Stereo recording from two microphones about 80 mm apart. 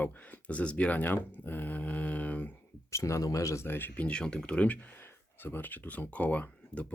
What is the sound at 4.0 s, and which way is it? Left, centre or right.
Speech, centre.